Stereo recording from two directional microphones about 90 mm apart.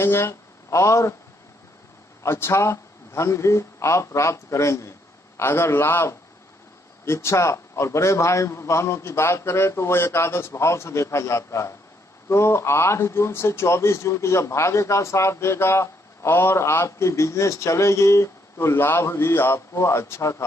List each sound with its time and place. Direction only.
0.0 s speech: 25° left (ahead or behind)
2.2 s a man's voice: 30° left (ahead or behind)